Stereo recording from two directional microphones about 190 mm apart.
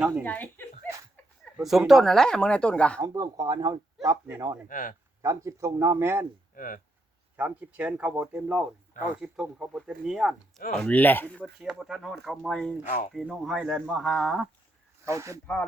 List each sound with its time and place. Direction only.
0.2 s speech: 10° left (ahead or behind)
1.5 s speech: 5° right (ahead or behind)
3.0 s speech: 20° right (ahead or behind)
4.7 s speech: 45° left (ahead or behind)
5.2 s speech: 15° right (ahead or behind)
6.6 s speech: 45° left (ahead or behind)
7.3 s speech: 10° right (ahead or behind)
10.8 s speech: 10° left (ahead or behind)
11.4 s speech: 5° right (ahead or behind)
12.8 s speech: 40° left (ahead or behind)
13.1 s speech: centre (ahead or behind)
15.0 s speech: 15° right (ahead or behind)